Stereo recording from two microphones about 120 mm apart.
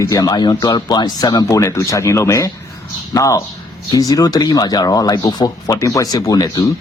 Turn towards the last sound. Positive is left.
turn(degrees=30)  # may be behind; listen again after turning